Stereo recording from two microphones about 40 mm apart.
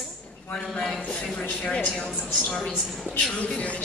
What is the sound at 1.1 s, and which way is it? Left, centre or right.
Speech, left.